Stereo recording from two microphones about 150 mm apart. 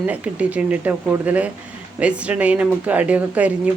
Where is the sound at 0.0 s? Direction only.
10° right (ahead or behind).